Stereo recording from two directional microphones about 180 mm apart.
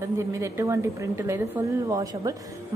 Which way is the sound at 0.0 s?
15° right (ahead or behind).